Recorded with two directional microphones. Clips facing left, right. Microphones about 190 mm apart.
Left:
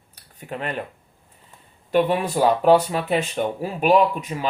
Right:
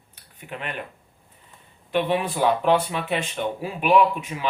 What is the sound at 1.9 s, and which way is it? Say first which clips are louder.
Speech: left 3 dB; 45° left (ahead or behind).